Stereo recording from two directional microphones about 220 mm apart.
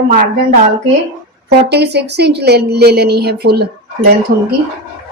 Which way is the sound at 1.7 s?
50° right (ahead or behind).